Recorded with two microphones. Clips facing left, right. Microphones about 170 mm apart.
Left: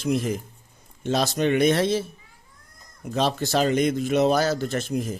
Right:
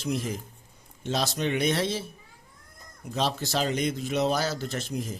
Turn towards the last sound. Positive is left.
turn(degrees=55)  # may be behind; listen again after turning